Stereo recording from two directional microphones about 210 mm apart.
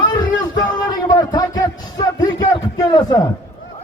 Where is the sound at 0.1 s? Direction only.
20° left (ahead or behind).